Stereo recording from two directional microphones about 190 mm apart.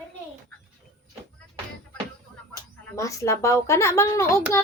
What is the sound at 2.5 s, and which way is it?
A woman's voice, 15° left (ahead or behind).